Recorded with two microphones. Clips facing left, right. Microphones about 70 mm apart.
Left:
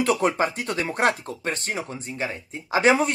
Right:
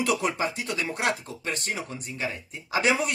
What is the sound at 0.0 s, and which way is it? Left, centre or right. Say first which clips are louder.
Speech: left 4 dB; left.